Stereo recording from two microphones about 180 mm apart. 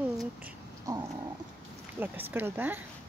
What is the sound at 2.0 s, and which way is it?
Speech, 10° right (ahead or behind).